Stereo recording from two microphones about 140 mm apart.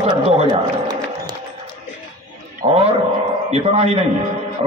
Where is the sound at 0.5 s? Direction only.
30° right (ahead or behind).